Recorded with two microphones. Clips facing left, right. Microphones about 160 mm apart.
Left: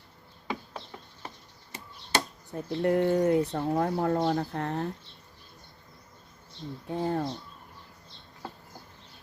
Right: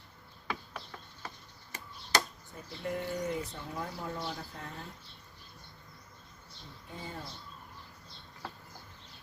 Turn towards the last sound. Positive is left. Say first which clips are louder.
# left 14 dB
turn(degrees=65)  # may be behind; listen again after turning